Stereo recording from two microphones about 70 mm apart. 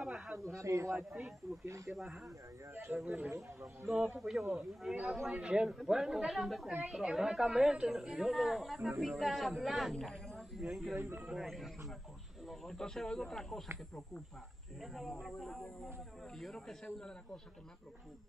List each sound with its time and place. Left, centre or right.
0.0 s a sound: centre
0.4 s a man's voice: right
2.0 s speech: centre
2.7 s speech: right
4.2 s speech: centre
10.6 s speech: centre
11.0 s speech: right
11.3 s speech: centre
14.8 s speech: centre